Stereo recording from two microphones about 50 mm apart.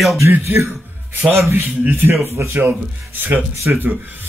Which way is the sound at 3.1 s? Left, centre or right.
Right.